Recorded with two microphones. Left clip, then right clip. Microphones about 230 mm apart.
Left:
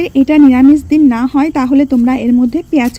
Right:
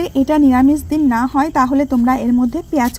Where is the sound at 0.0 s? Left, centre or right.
Right.